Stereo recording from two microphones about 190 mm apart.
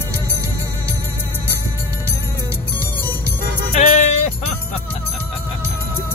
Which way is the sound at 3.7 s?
40° left (ahead or behind).